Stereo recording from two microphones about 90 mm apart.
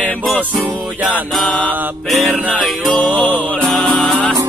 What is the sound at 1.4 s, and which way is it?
Music, 15° left (ahead or behind).